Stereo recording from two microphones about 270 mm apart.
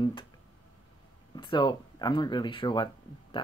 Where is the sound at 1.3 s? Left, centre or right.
Centre.